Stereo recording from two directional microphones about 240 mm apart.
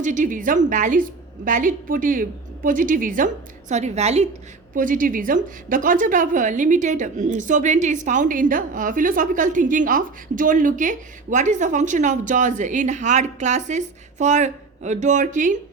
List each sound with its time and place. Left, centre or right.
0.0 s a woman's voice: right